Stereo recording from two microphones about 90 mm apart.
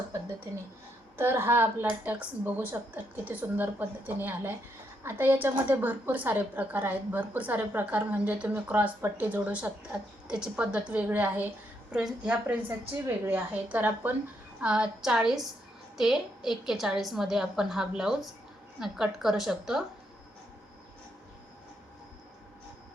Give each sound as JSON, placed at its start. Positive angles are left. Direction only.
{"t": 1.1, "sound": "a woman's voice", "side_deg": -25}
{"t": 13.1, "sound": "a woman's voice", "side_deg": -20}